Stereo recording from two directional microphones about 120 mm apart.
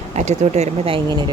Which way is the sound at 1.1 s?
35° right (ahead or behind).